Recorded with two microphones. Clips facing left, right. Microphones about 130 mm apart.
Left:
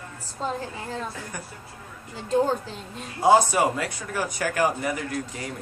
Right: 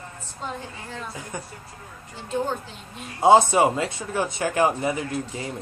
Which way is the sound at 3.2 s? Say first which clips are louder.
Right 3 dB; 25° right (ahead or behind).